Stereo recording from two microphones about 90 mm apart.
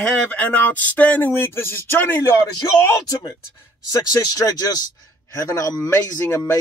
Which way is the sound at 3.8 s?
40° left (ahead or behind).